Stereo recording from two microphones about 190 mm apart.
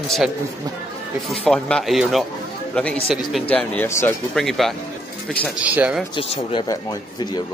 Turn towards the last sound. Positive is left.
turn(degrees=20)  # may be behind; listen again after turning